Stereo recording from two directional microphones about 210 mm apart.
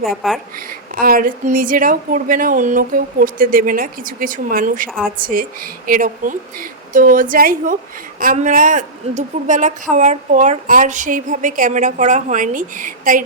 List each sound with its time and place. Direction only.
0.2 s speech: centre (ahead or behind)
0.9 s a woman's voice: 40° right (ahead or behind)